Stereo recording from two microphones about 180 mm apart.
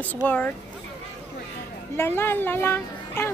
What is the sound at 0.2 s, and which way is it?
Speech, 10° left (ahead or behind).